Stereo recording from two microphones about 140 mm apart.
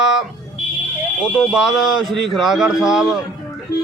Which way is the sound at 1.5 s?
Centre (ahead or behind).